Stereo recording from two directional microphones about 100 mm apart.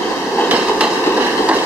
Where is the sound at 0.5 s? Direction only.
15° right (ahead or behind).